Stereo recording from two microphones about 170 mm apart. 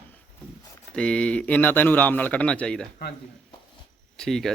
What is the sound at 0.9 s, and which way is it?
A man's voice, 5° left (ahead or behind).